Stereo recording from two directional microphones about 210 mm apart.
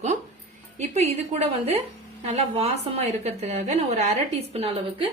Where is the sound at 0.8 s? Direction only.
30° right (ahead or behind).